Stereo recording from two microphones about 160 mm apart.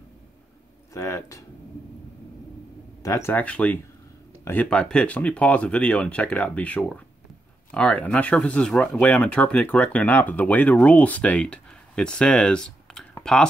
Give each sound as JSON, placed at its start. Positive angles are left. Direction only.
{"t": 0.9, "sound": "speech", "side_deg": 20}
{"t": 3.0, "sound": "speech", "side_deg": 15}